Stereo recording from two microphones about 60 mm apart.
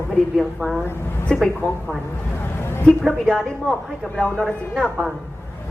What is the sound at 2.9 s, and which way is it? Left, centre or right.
Speech, centre.